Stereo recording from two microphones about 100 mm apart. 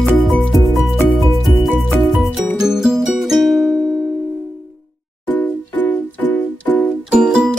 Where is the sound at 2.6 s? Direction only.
5° right (ahead or behind).